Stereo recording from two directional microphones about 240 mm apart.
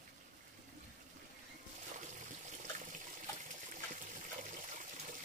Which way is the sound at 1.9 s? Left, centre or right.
Right.